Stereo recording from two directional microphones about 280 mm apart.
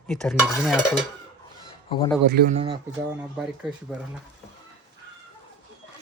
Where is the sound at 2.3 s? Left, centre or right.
Right.